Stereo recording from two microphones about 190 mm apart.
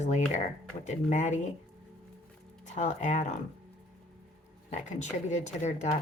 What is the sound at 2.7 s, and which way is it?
Speech, 40° left (ahead or behind).